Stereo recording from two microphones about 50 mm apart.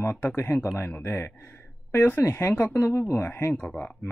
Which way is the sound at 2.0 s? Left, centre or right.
Left.